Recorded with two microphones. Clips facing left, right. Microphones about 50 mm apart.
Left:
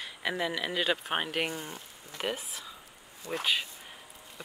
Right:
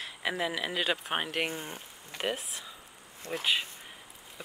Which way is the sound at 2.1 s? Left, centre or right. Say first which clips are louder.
Right 1 dB; centre.